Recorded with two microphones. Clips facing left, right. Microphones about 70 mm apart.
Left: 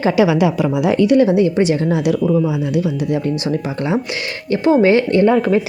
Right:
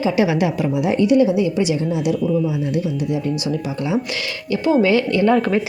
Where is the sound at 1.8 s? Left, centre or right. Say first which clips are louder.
Left 3 dB; left.